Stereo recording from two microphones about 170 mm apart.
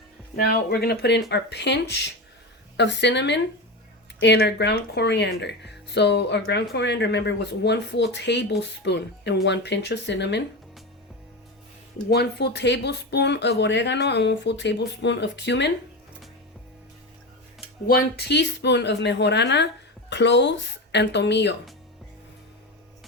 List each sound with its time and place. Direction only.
0.3 s speech: 65° left (ahead or behind); by 10.4 s 90° left
12.0 s speech: 70° left (ahead or behind); by 15.7 s 90° left
17.8 s speech: 70° left (ahead or behind); by 21.5 s 90° left